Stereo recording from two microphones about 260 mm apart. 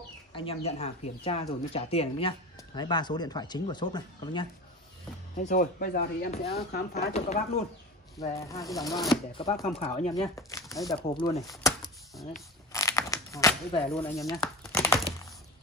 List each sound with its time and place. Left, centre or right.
0.3 s speech: left
5.4 s speech: left
7.0 s speech: left
8.4 s speech: centre
10.2 s speech: centre
12.7 s tearing: centre